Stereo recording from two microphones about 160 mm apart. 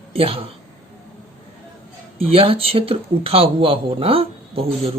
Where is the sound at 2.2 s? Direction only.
35° right (ahead or behind).